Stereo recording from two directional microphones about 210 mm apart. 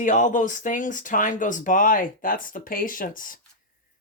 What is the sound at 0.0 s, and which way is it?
Speech, 35° left (ahead or behind).